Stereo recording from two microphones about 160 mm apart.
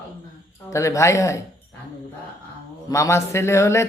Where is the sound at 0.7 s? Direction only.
20° left (ahead or behind).